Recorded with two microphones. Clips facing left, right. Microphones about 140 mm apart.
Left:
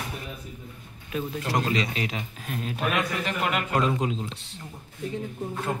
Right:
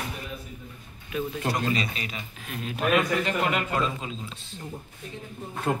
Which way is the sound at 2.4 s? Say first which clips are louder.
Left 1 dB; 40° left (ahead or behind).